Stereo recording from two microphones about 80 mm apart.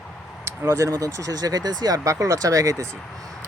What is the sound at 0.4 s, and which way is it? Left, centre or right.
Speech, right.